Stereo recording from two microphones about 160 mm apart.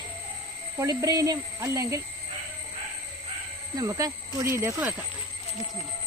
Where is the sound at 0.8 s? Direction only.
20° right (ahead or behind).